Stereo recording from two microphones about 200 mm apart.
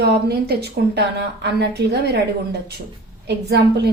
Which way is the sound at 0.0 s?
55° right (ahead or behind).